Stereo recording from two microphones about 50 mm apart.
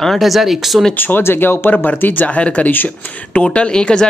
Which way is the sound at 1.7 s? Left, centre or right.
Left.